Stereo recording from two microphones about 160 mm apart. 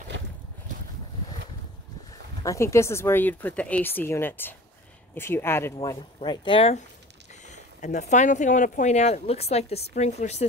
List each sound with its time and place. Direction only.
2.4 s a woman's voice: 20° left (ahead or behind); by 6.8 s 35° left (ahead or behind)
7.4 s speech: 50° left (ahead or behind)